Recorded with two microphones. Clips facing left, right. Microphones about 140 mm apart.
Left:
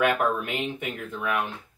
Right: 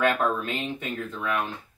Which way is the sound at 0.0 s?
15° left (ahead or behind).